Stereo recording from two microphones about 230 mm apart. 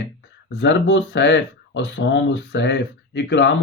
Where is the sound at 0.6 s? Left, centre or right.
Left.